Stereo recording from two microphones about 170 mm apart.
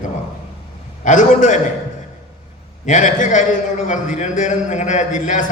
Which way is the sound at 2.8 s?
45° left (ahead or behind).